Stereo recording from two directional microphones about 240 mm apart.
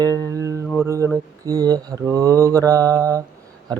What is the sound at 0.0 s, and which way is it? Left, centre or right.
Music, centre.